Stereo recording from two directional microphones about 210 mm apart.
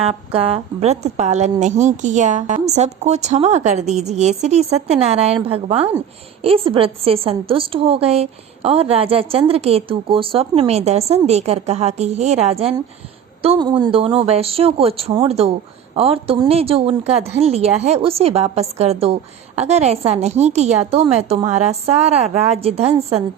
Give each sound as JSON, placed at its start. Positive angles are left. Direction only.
{"t": 0.0, "sound": "a woman's voice", "side_deg": -30}